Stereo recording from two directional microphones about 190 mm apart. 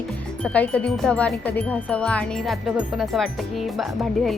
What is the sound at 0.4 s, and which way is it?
Speech, 5° left (ahead or behind).